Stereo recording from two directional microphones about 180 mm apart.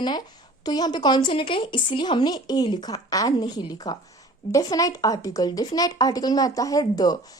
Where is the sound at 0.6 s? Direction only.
20° left (ahead or behind).